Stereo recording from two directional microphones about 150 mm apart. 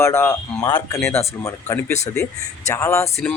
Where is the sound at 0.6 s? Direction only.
25° left (ahead or behind).